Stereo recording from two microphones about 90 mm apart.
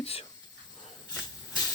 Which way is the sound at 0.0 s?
90° left.